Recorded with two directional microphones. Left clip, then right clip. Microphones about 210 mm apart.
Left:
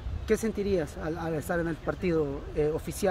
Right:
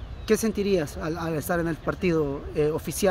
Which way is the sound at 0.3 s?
45° right (ahead or behind).